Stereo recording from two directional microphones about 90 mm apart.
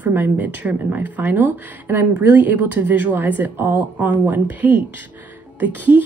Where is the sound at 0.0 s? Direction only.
20° right (ahead or behind).